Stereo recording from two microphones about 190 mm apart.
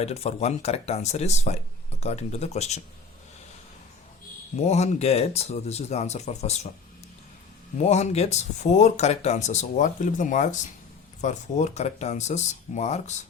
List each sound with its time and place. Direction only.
0.0 s speech: 35° left (ahead or behind)
4.5 s speech: 35° left (ahead or behind)
7.8 s speech: 35° left (ahead or behind)